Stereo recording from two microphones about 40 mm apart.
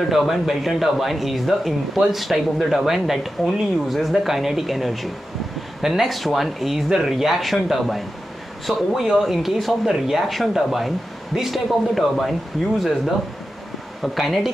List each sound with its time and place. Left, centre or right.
0.1 s speech: centre
8.7 s speech: centre
9.2 s speech: centre